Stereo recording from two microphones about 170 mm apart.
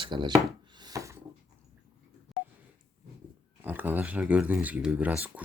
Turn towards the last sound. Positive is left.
turn(degrees=-10)  # may be behind; listen again after turning